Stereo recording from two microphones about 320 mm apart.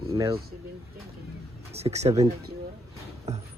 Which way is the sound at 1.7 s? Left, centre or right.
Centre.